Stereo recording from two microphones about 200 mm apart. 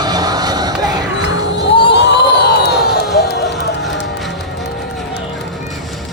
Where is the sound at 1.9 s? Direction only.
55° left (ahead or behind).